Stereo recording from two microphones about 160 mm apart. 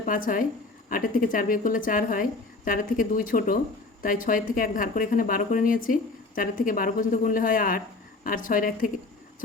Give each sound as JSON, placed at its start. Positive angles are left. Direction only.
{"t": 0.0, "sound": "a woman's voice", "side_deg": 55}